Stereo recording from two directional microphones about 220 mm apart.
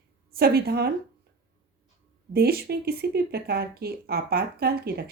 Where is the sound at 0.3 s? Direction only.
45° right (ahead or behind).